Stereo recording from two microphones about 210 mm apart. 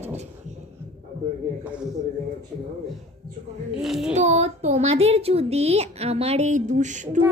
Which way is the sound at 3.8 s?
Centre (ahead or behind).